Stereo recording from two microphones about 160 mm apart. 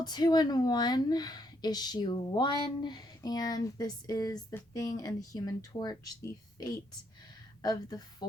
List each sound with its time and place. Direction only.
0.0 s speech: 25° left (ahead or behind)